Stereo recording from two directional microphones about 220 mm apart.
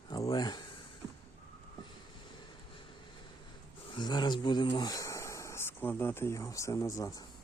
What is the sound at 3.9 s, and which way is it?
Speech, 20° left (ahead or behind).